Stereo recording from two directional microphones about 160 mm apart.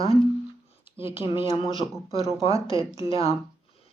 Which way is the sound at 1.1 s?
35° left (ahead or behind).